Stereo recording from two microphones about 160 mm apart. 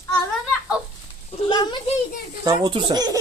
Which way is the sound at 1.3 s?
30° left (ahead or behind).